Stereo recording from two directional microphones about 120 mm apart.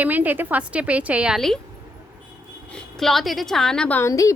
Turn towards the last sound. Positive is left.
turn(degrees=25)  # may be behind; listen again after turning